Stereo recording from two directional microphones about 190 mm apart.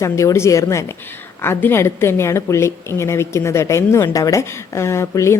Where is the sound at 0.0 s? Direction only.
15° left (ahead or behind).